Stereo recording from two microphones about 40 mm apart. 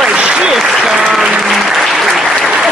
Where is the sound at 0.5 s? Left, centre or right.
Centre.